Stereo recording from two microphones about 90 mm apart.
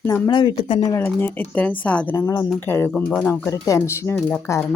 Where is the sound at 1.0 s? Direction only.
25° left (ahead or behind).